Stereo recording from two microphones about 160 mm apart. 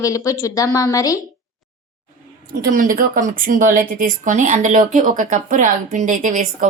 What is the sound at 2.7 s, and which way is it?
Speech, 60° right (ahead or behind).